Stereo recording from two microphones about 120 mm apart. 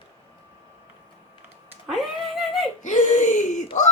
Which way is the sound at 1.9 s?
Centre (ahead or behind).